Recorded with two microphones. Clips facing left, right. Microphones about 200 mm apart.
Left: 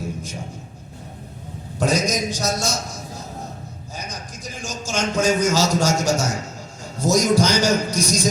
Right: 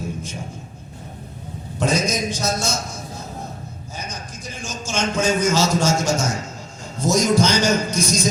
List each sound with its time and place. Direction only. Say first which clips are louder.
1.8 s a man's voice: even; 35° left (ahead or behind)